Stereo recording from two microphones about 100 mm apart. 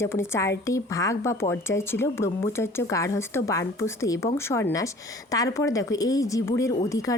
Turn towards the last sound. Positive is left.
turn(degrees=35)  # may be behind; listen again after turning